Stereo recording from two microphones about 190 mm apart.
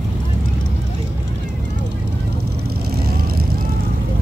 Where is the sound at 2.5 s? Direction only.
55° right (ahead or behind).